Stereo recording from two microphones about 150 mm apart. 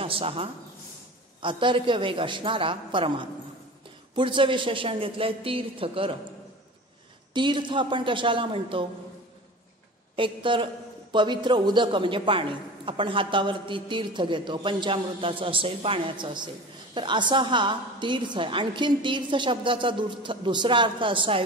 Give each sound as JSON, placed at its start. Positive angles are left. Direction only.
{"t": 0.0, "sound": "a sound", "side_deg": -40}
{"t": 1.4, "sound": "a man's voice", "side_deg": -35}
{"t": 7.3, "sound": "a man's voice", "side_deg": -30}
{"t": 10.1, "sound": "a man's voice", "side_deg": -35}